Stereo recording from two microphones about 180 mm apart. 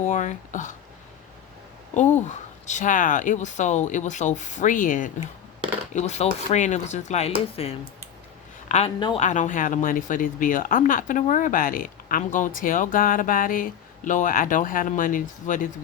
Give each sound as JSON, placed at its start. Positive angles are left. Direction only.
{"t": 0.1, "sound": "speech", "side_deg": 45}
{"t": 2.2, "sound": "speech", "side_deg": 40}
{"t": 9.0, "sound": "a woman's voice", "side_deg": 25}
{"t": 9.2, "sound": "speech", "side_deg": 45}